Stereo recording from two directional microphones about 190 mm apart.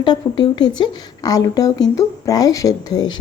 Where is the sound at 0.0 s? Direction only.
25° left (ahead or behind).